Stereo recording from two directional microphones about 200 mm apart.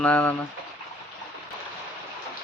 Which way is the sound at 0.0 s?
5° left (ahead or behind).